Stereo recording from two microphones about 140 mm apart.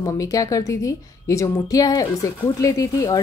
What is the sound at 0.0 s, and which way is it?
A woman's voice, 25° left (ahead or behind).